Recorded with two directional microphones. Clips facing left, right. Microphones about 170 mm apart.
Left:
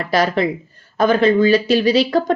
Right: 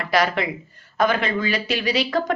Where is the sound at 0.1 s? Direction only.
35° left (ahead or behind).